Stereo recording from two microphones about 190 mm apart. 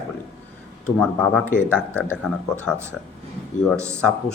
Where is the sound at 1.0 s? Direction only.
5° left (ahead or behind).